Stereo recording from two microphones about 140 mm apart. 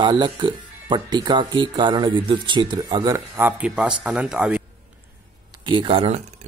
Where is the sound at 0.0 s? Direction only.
35° right (ahead or behind).